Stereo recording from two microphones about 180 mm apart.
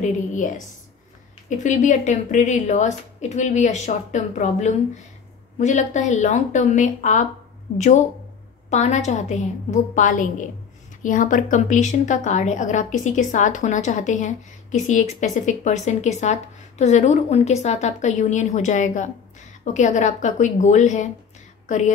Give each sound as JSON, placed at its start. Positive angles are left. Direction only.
{"t": 0.0, "sound": "a woman's voice", "side_deg": 45}
{"t": 1.6, "sound": "a woman's voice", "side_deg": 40}